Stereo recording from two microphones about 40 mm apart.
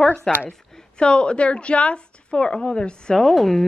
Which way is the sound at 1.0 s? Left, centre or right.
Left.